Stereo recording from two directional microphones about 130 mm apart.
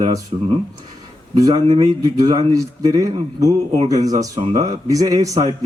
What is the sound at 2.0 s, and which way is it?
A man's voice, 30° right (ahead or behind).